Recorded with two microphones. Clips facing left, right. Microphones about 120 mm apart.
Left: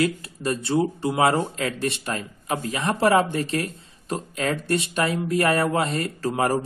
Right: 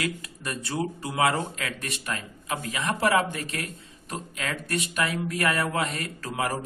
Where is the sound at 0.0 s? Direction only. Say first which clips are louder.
Left 8 dB; 30° left (ahead or behind).